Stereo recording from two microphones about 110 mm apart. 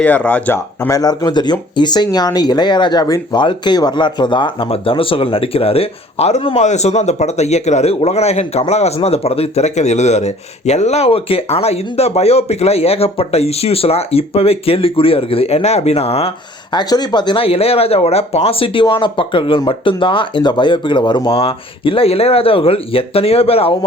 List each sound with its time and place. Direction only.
0.0 s speech: 15° left (ahead or behind); by 8.9 s 80° left
9.0 s speech: 65° left (ahead or behind)
16.7 s speech: 40° left (ahead or behind)
21.2 s speech: 55° left (ahead or behind)